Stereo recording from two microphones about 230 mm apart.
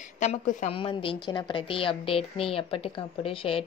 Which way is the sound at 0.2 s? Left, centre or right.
Left.